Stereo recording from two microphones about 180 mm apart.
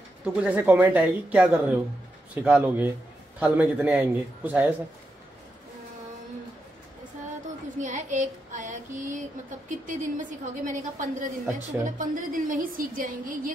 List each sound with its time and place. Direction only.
0.2 s speech: 5° right (ahead or behind)
7.8 s a woman's voice: 45° right (ahead or behind)